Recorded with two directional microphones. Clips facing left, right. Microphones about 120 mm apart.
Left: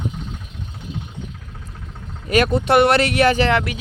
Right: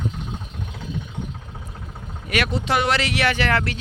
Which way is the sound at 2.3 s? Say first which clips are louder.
Left 7 dB; 45° left (ahead or behind).